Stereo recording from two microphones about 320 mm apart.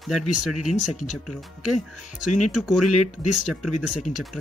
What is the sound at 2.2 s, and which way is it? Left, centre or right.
Speech, left.